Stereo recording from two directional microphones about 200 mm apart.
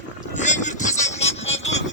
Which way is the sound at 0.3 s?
35° left (ahead or behind).